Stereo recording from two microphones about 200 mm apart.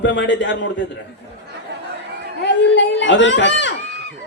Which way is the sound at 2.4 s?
65° left (ahead or behind).